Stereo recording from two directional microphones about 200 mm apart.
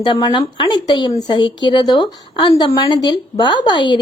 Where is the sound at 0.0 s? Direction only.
20° left (ahead or behind).